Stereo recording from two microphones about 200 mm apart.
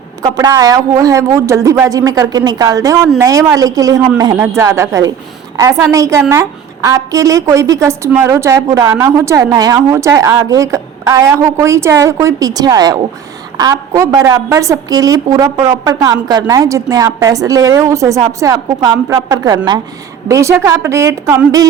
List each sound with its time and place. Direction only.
0.2 s a woman's voice: 15° right (ahead or behind)